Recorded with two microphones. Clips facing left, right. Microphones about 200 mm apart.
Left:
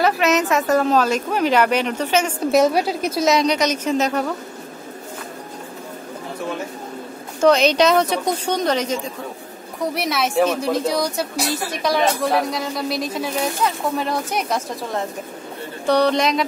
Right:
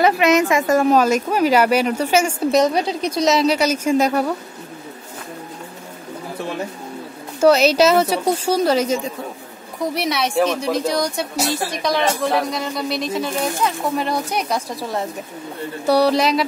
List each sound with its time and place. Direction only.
0.2 s a woman's voice: 10° right (ahead or behind)
2.5 s a woman's voice: 5° left (ahead or behind); by 4.3 s 10° right (ahead or behind)
7.3 s a woman's voice: 5° right (ahead or behind)
11.3 s speech: 25° right (ahead or behind)
11.8 s a woman's voice: 5° left (ahead or behind)
15.9 s a woman's voice: 5° right (ahead or behind)